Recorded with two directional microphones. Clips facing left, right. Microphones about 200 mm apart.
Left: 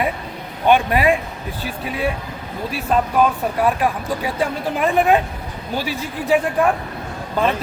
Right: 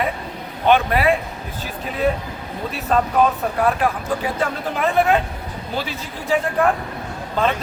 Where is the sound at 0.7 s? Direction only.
15° left (ahead or behind).